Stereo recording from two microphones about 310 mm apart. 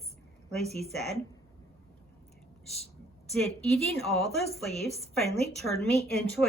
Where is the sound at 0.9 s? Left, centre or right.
Centre.